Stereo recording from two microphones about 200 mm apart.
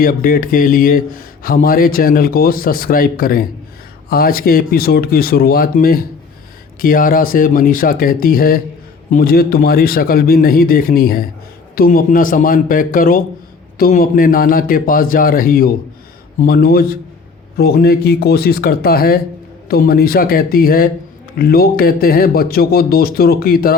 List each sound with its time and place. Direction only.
0.0 s speech: 45° left (ahead or behind)